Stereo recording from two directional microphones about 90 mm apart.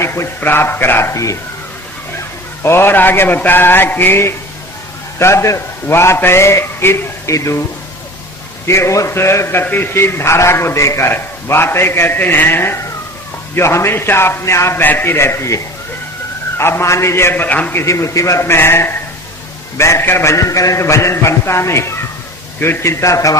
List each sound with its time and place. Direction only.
0.0 s a man's voice: 30° left (ahead or behind)
2.6 s a man's voice: 25° left (ahead or behind)
8.6 s a man's voice: 30° left (ahead or behind)
17.8 s a man's voice: 35° left (ahead or behind)